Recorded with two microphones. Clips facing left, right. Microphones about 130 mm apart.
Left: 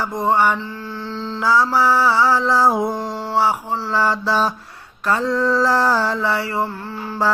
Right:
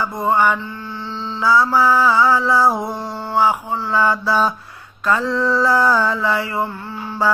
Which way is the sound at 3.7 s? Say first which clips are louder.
Right 1 dB; 35° left (ahead or behind).